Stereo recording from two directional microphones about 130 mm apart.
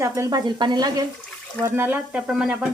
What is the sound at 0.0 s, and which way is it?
Speech, 25° right (ahead or behind).